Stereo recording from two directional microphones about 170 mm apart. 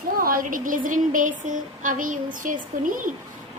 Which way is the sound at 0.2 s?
55° right (ahead or behind).